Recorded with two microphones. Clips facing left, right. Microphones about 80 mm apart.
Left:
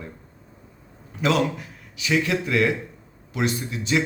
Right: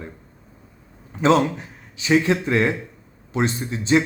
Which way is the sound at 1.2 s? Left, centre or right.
Right.